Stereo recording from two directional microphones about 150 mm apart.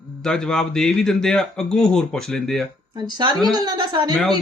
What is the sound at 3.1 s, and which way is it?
Speech, 30° right (ahead or behind).